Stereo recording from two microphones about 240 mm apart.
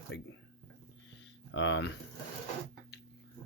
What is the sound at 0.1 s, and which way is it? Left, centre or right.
Speech, left.